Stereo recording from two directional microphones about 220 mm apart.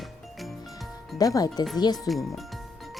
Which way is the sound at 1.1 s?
15° left (ahead or behind).